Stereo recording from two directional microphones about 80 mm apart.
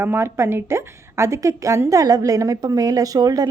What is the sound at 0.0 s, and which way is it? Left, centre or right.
A woman's voice, right.